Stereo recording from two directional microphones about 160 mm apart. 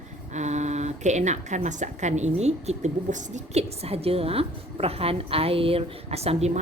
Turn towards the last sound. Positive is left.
turn(degrees=-40)  # may be behind; listen again after turning